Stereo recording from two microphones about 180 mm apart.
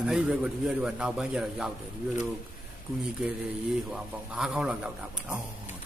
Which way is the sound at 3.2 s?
5° right (ahead or behind).